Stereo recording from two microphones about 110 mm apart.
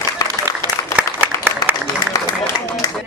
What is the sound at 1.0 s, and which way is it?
Applause, 15° right (ahead or behind).